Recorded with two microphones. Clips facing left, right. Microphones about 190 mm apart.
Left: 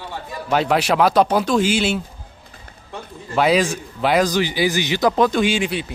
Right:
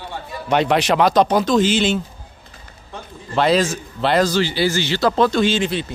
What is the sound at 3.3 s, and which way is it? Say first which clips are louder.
Speech: even; 10° left (ahead or behind).